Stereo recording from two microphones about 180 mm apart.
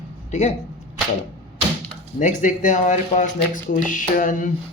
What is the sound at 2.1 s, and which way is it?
Speech, 45° left (ahead or behind).